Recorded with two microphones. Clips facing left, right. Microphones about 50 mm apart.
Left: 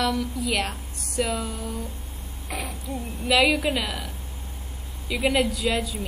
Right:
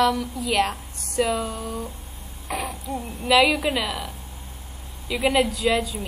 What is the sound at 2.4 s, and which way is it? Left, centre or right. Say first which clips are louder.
A woman's voice: right 4 dB; centre.